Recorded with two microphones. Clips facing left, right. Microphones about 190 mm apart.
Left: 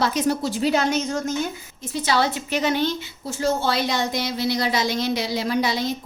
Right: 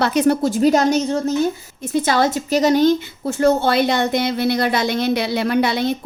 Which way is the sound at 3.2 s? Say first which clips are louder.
Right 7 dB; 60° right (ahead or behind).